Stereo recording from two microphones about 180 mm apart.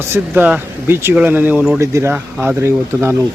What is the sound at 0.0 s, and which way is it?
Speech, 10° right (ahead or behind).